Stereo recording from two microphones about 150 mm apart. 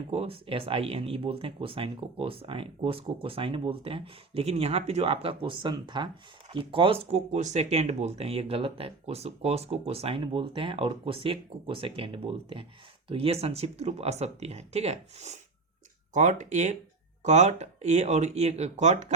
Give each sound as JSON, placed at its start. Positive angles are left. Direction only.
{"t": 0.1, "sound": "speech", "side_deg": -40}